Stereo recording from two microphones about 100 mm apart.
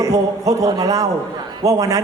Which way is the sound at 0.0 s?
35° right (ahead or behind).